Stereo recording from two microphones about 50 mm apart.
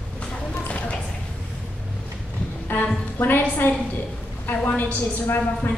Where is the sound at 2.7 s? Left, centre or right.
Left.